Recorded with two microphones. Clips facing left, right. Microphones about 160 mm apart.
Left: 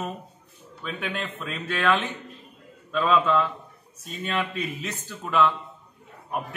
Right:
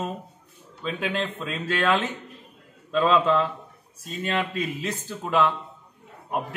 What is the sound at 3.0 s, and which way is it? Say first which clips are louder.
Speech: right 1 dB; 25° right (ahead or behind).